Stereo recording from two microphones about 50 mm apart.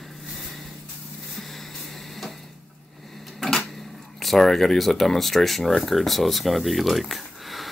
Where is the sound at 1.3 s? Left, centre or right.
Centre.